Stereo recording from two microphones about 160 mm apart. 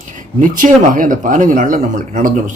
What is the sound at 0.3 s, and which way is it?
A man's voice, 55° right (ahead or behind).